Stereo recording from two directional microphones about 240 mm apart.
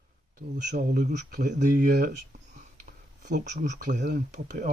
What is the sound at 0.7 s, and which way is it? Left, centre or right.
A man's voice, right.